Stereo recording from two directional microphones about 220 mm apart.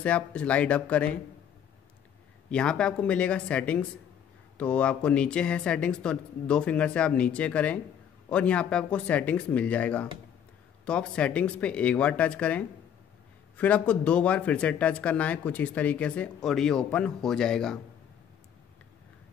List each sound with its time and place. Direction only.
0.0 s speech: 5° left (ahead or behind)
2.5 s speech: 5° left (ahead or behind)